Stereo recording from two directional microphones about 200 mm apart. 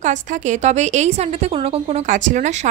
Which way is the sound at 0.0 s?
35° right (ahead or behind).